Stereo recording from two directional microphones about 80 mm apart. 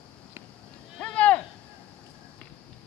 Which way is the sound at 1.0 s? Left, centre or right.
Centre.